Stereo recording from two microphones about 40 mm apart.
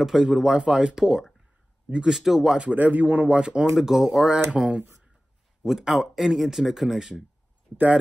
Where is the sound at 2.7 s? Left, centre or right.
Right.